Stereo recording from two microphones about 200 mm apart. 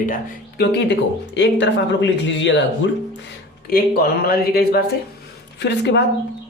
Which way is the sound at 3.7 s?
50° left (ahead or behind).